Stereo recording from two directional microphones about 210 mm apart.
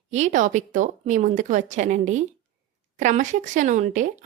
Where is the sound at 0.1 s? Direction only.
35° right (ahead or behind).